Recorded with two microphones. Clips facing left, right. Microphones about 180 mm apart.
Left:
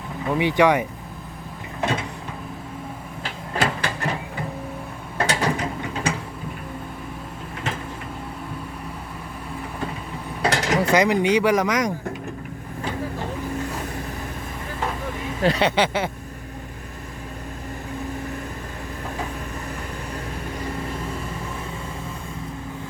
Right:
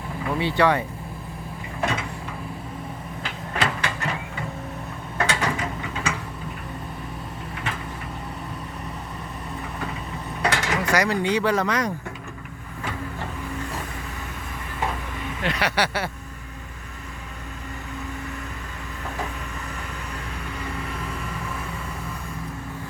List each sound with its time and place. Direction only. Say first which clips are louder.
0.3 s speech: left 3 dB; 15° left (ahead or behind)
3.2 s vehicle: left 2 dB; 35° left (ahead or behind)
5.1 s mechanisms: left 2 dB; 35° left (ahead or behind)
10.4 s speech: left 3 dB; 35° left (ahead or behind); by 11.9 s 15° left (ahead or behind)
15.4 s speech: left 5 dB; 35° left (ahead or behind)
20.6 s vehicle: left 3 dB; 35° left (ahead or behind)